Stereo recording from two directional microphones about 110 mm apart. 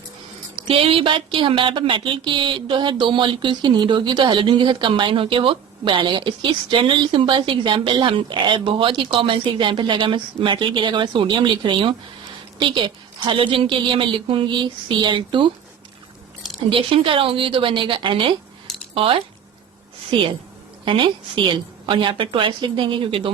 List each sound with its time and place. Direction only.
0.7 s speech: 55° right (ahead or behind)
16.6 s speech: 50° right (ahead or behind)